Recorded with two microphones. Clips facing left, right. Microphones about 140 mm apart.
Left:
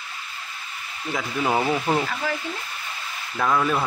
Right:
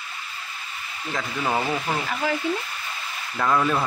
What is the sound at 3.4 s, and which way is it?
Speech, centre (ahead or behind).